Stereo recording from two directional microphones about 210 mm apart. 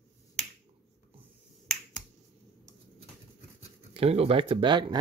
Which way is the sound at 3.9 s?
30° right (ahead or behind).